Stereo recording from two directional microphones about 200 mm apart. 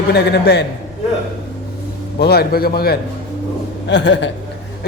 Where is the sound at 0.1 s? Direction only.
55° left (ahead or behind).